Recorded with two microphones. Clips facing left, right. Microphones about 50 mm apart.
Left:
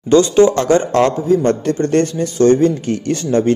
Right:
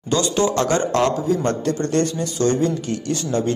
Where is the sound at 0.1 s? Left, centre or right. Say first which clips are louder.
Left 9 dB; left.